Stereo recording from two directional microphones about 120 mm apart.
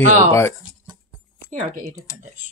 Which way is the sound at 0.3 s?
25° left (ahead or behind).